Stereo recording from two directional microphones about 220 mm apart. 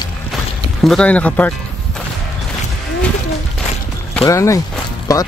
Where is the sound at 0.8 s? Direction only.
5° left (ahead or behind).